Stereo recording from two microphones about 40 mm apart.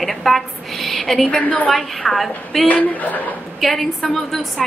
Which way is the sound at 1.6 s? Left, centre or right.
Centre.